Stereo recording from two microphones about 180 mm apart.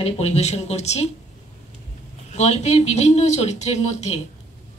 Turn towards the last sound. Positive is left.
turn(degrees=40)  # may be behind; listen again after turning